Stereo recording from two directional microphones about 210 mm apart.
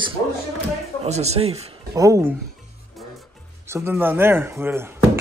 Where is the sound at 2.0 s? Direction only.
15° right (ahead or behind).